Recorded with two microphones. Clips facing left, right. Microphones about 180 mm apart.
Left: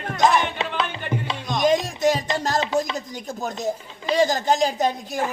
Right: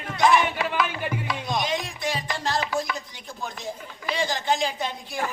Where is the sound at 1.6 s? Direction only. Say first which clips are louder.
Left 14 dB; 45° left (ahead or behind).